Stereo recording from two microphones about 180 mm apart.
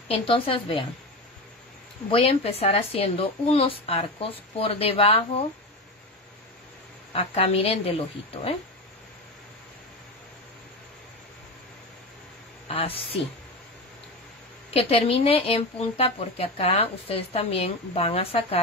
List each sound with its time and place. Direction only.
0.1 s speech: 30° left (ahead or behind)
2.0 s speech: 30° left (ahead or behind)
7.1 s speech: 35° left (ahead or behind)
12.6 s a woman's voice: 30° left (ahead or behind)
14.7 s speech: 30° left (ahead or behind)